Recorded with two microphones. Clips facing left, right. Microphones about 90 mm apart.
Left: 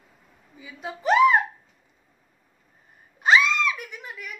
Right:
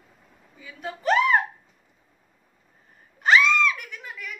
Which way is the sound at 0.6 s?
10° left (ahead or behind).